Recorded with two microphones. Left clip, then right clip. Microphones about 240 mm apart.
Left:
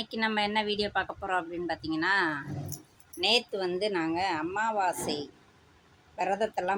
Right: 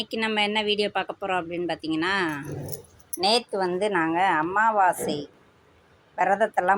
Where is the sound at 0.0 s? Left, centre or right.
Centre.